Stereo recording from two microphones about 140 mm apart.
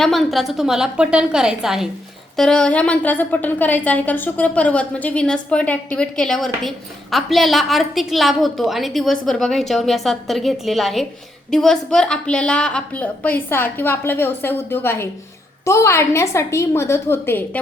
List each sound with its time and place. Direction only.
0.0 s a woman's voice: centre (ahead or behind)